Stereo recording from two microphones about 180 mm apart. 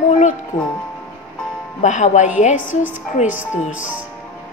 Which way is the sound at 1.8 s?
40° left (ahead or behind).